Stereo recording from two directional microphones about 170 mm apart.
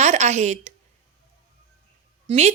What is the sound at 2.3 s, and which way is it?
Speech, 40° right (ahead or behind).